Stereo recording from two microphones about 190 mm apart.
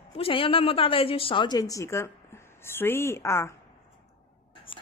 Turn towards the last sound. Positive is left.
turn(degrees=15)  # may be behind; listen again after turning